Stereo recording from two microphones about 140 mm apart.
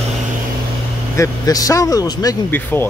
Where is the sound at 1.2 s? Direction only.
25° left (ahead or behind).